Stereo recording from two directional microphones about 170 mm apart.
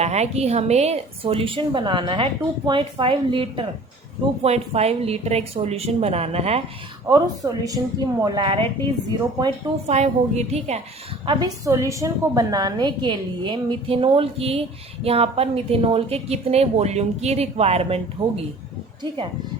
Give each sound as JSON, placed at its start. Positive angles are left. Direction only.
{"t": 0.0, "sound": "a woman's voice", "side_deg": -40}
{"t": 7.1, "sound": "a woman's voice", "side_deg": -20}
{"t": 9.8, "sound": "a woman's voice", "side_deg": -40}
{"t": 11.3, "sound": "a woman's voice", "side_deg": -20}